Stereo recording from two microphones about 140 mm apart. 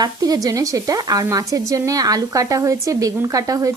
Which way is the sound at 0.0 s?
25° right (ahead or behind).